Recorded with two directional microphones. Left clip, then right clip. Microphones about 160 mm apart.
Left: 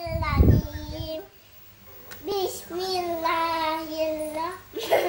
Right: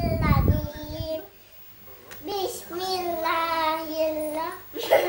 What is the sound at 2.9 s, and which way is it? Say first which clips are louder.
Child singing: even; 20° right (ahead or behind).